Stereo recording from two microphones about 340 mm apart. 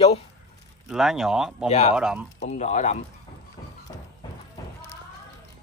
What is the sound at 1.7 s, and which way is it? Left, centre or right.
Speech, centre.